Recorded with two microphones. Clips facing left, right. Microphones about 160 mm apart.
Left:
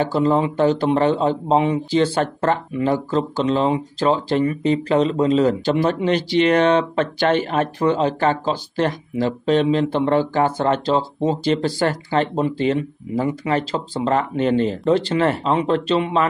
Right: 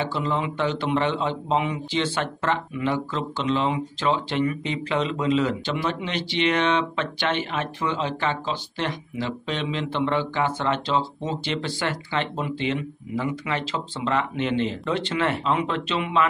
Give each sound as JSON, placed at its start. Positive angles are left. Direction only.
{"t": 0.0, "sound": "a man's voice", "side_deg": 40}